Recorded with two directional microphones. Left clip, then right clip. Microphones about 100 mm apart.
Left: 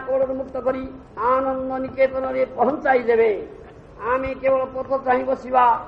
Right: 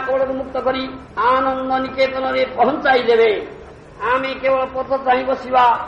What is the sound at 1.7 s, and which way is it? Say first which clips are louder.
A man's voice: right 3 dB; 30° left (ahead or behind).